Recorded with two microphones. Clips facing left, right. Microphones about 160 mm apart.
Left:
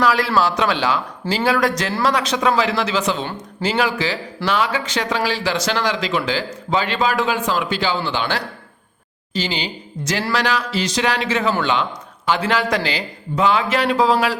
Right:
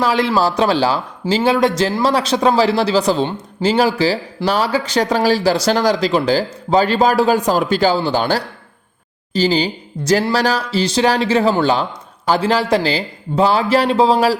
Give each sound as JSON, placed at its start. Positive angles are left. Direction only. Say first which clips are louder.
{"t": 0.0, "sound": "speech", "louder": "right 2 dB", "side_deg": -25}